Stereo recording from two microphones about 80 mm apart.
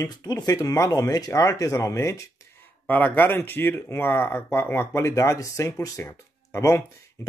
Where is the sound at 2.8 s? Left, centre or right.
Left.